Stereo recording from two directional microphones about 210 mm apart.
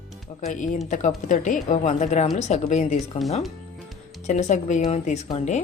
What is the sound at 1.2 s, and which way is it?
A woman's voice, 40° left (ahead or behind).